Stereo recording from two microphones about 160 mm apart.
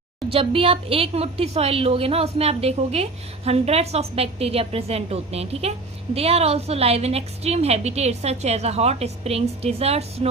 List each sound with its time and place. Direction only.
0.3 s a woman's voice: 35° right (ahead or behind)